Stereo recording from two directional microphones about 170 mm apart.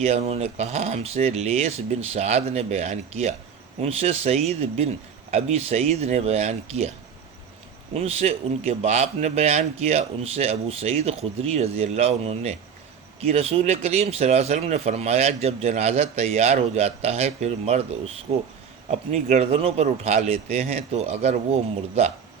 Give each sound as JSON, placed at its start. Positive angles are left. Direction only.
{"t": 0.0, "sound": "speech", "side_deg": -40}
{"t": 7.9, "sound": "speech", "side_deg": -35}